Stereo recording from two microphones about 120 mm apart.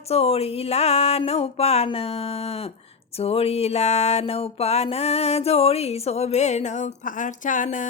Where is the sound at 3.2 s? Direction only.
55° left (ahead or behind).